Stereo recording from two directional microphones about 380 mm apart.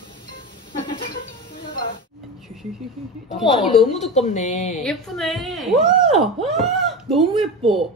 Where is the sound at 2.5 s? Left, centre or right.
Centre.